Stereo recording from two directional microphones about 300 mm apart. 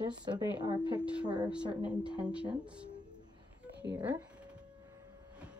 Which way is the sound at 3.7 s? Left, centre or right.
Right.